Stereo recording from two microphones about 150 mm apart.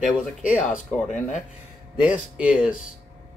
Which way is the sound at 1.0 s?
50° left (ahead or behind).